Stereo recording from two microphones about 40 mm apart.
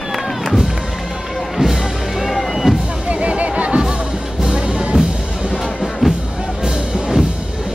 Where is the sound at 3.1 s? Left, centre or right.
Right.